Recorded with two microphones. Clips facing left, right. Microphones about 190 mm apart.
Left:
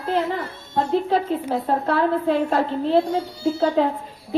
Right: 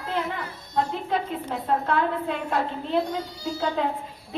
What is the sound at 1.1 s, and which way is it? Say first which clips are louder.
A woman's voice: left 6 dB; 35° left (ahead or behind).